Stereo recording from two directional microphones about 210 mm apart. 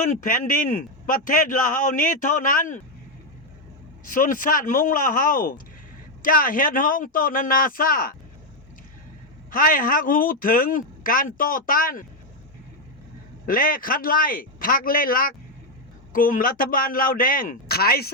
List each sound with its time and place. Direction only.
0.0 s a man's voice: 40° left (ahead or behind)
4.1 s a man's voice: 40° left (ahead or behind)
9.5 s a man's voice: 40° left (ahead or behind)
13.4 s a man's voice: 40° left (ahead or behind)